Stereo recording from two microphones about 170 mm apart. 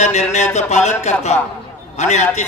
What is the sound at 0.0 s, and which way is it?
A man's voice, 40° left (ahead or behind).